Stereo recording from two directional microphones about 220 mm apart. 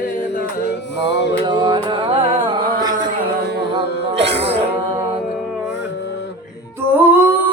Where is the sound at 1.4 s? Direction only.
20° right (ahead or behind).